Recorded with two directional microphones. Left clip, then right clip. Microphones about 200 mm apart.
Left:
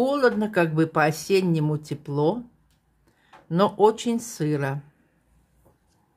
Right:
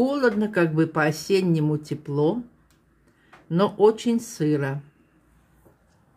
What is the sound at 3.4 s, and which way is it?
Speech, 15° left (ahead or behind).